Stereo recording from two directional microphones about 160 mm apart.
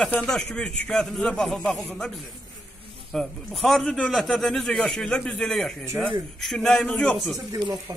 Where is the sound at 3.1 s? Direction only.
Centre (ahead or behind).